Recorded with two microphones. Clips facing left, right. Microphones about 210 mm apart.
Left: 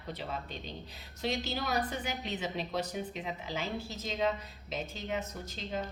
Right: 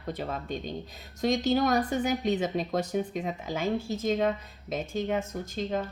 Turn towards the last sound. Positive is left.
turn(degrees=-50)  # may be behind; listen again after turning